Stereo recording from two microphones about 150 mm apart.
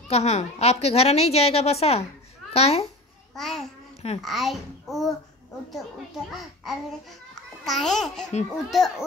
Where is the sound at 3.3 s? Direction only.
Centre (ahead or behind).